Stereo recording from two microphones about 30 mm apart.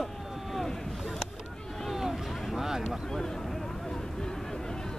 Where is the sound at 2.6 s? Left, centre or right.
Centre.